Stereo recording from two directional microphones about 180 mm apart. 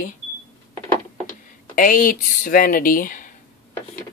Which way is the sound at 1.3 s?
50° left (ahead or behind).